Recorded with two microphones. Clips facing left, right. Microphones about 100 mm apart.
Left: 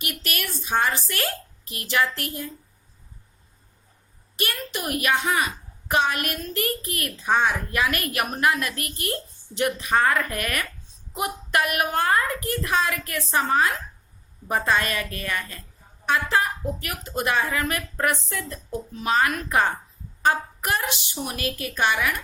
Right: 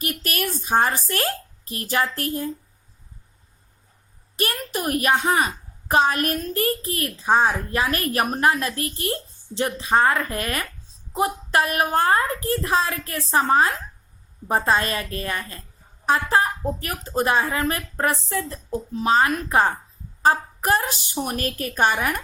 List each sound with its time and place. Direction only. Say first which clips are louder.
0.0 s a woman's voice: right 4 dB; 40° right (ahead or behind)
4.4 s a woman's voice: right 4 dB; 40° right (ahead or behind)